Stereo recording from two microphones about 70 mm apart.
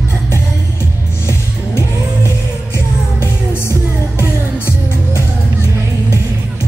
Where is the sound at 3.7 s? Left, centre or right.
Left.